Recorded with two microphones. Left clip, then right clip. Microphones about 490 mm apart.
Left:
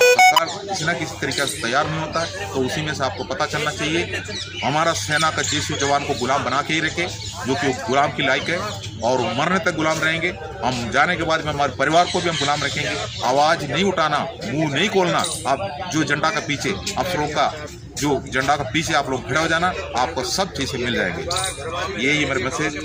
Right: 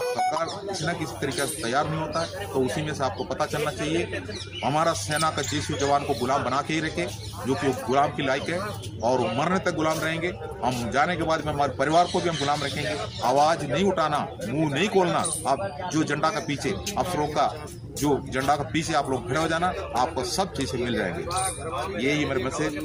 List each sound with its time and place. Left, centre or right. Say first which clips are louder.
0.3 s a man's voice: left 10 dB; right